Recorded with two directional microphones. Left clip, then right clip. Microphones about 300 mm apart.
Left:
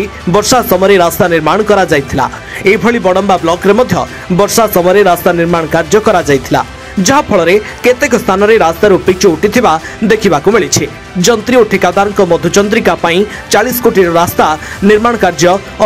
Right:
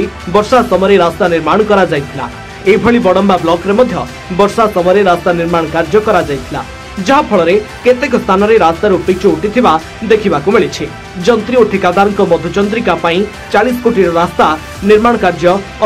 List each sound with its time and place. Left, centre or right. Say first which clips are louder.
0.3 s speech: even; left